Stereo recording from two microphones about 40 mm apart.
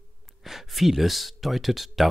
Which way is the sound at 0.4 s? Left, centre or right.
Centre.